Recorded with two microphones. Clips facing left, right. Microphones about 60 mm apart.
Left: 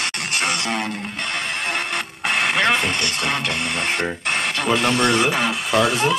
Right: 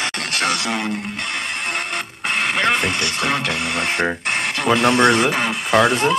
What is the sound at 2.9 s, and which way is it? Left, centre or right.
Speech, right.